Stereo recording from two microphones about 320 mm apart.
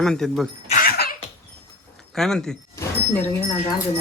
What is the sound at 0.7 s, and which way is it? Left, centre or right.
Cough, left.